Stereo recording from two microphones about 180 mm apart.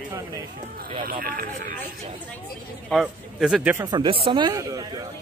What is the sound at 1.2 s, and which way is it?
Speech, 55° right (ahead or behind).